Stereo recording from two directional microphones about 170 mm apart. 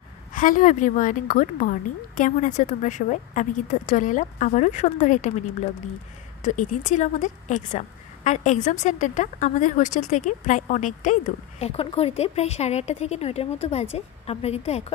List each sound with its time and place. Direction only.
0.3 s a woman's voice: 50° left (ahead or behind)
6.4 s a woman's voice: 45° left (ahead or behind)
11.6 s speech: 35° left (ahead or behind)